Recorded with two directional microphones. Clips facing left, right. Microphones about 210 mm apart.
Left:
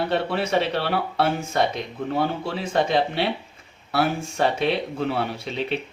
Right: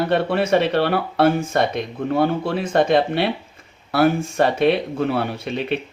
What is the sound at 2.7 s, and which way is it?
Speech, 50° right (ahead or behind).